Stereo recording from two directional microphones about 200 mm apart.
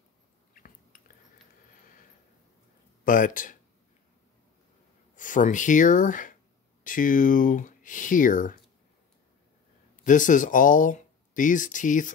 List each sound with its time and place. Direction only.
0.6 s chewing: 45° left (ahead or behind)
3.1 s speech: 40° left (ahead or behind)
5.1 s speech: 40° left (ahead or behind)
10.0 s speech: 40° left (ahead or behind)